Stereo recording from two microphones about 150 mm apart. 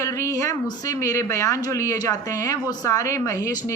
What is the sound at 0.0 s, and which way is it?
Speech, 20° left (ahead or behind).